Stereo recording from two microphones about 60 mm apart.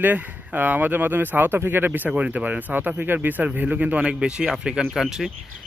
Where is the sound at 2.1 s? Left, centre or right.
Right; by 5.3 s centre.